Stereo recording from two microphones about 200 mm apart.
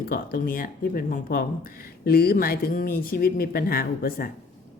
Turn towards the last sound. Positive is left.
turn(degrees=45)  # may be behind; listen again after turning